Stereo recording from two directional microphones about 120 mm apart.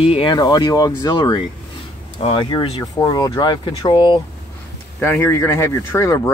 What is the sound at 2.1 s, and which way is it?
Speech, 45° left (ahead or behind).